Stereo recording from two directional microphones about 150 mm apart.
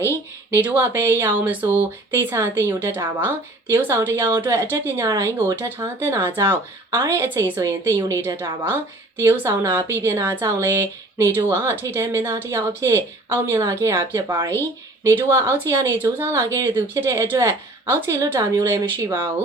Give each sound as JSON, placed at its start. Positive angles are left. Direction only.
{"t": 0.5, "sound": "speech", "side_deg": -15}